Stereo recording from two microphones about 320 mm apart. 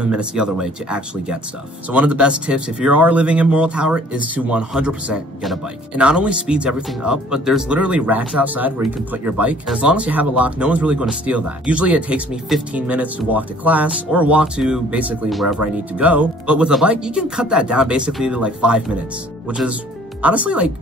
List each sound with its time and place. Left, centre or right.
0.0 s speech: centre